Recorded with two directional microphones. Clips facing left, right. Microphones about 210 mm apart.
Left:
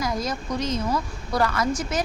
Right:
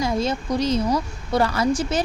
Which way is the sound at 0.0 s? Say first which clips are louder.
Right 4 dB; 25° right (ahead or behind).